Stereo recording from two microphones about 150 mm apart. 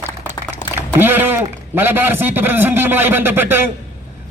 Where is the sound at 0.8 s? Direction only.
15° right (ahead or behind).